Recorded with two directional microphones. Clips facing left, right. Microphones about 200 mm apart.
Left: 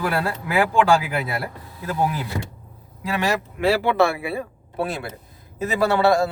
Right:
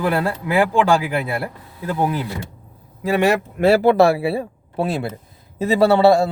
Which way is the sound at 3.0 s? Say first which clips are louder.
Right 6 dB; 55° right (ahead or behind).